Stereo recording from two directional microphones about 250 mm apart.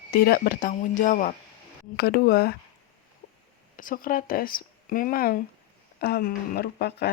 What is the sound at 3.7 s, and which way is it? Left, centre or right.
Speech, left.